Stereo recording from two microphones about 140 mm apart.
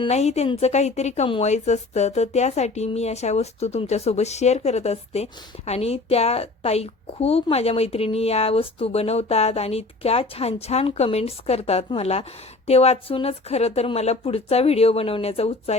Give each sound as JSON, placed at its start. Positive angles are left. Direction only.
{"t": 0.1, "sound": "speech", "side_deg": 50}